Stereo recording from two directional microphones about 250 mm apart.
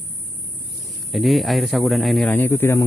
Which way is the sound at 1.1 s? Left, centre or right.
Centre.